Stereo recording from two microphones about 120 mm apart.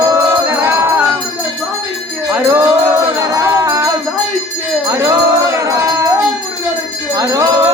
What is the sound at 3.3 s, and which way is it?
Music, 25° right (ahead or behind).